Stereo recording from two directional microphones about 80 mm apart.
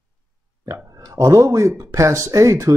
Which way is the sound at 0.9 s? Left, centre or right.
Right.